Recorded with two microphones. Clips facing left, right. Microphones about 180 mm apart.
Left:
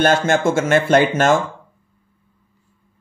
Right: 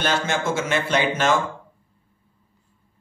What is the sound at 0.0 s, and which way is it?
A man's voice, 50° left (ahead or behind).